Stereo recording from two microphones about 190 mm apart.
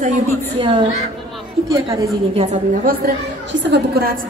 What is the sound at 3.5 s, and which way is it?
Speech, 65° right (ahead or behind).